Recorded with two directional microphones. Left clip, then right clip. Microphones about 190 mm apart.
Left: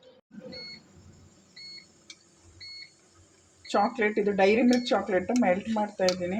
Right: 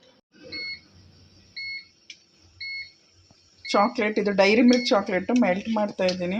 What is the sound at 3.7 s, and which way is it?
Speech, 25° right (ahead or behind).